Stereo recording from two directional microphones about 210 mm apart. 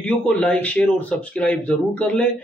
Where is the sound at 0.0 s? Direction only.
5° left (ahead or behind).